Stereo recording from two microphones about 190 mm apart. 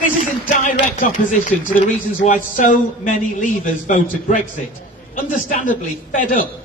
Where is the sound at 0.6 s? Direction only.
45° left (ahead or behind).